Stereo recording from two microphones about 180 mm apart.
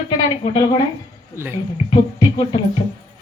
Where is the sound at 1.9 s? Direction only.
25° left (ahead or behind).